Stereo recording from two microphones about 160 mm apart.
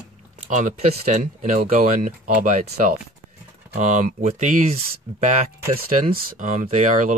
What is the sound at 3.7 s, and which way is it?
Speech, 50° right (ahead or behind).